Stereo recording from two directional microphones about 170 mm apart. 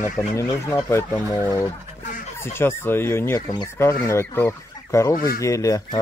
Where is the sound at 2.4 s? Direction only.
15° left (ahead or behind).